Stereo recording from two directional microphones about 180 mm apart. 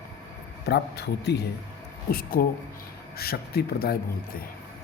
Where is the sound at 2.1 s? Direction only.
55° left (ahead or behind).